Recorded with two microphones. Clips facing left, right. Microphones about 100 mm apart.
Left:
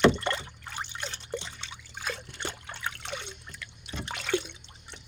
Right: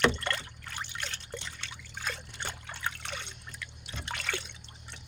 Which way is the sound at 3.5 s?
Centre (ahead or behind).